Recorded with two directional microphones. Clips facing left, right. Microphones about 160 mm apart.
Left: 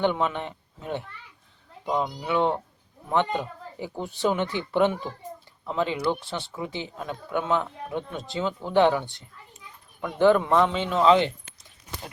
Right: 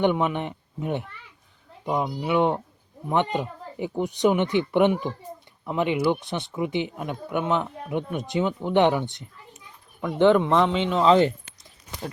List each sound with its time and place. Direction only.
0.0 s speech: 15° right (ahead or behind)
10.5 s speech: 5° left (ahead or behind)
11.0 s speech: 35° right (ahead or behind)